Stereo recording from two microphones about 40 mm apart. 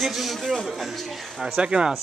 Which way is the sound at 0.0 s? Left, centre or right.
Centre.